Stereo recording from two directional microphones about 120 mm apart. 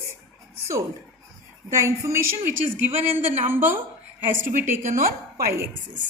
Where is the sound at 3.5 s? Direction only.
20° right (ahead or behind).